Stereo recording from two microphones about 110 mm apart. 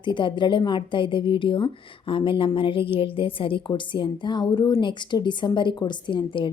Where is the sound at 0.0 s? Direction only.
45° left (ahead or behind).